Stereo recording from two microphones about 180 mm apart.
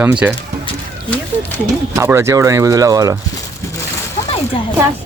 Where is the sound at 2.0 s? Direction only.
15° right (ahead or behind).